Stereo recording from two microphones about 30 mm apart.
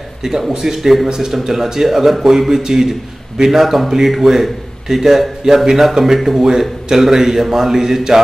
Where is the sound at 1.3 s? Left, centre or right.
Centre.